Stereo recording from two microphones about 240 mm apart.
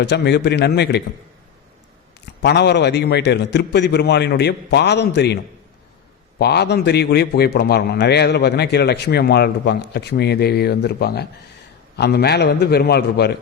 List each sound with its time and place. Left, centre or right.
0.0 s a man's voice: left
2.4 s a man's voice: left
6.4 s a man's voice: left